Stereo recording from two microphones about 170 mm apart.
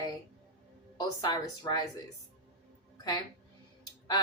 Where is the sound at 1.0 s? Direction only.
25° left (ahead or behind).